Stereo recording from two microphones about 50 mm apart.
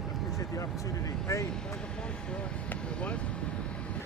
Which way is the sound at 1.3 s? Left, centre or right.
Left.